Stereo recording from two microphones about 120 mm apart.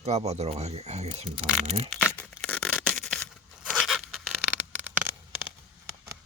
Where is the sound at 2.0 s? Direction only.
15° left (ahead or behind).